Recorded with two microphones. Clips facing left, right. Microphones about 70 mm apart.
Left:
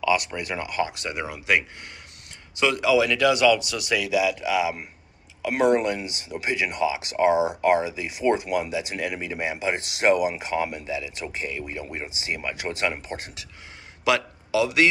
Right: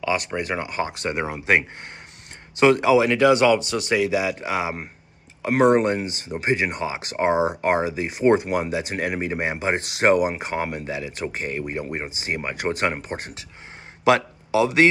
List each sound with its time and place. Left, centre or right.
0.0 s a man's voice: right